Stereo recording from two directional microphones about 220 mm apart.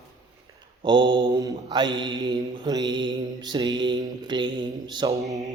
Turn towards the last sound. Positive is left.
turn(degrees=-20)  # may be behind; listen again after turning